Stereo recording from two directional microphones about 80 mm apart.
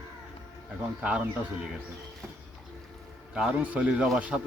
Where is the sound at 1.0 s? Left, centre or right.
Centre.